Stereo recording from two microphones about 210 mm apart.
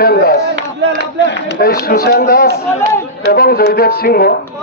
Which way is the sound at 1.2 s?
55° left (ahead or behind).